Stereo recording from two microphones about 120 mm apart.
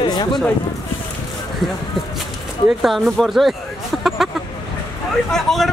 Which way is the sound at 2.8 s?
Centre (ahead or behind).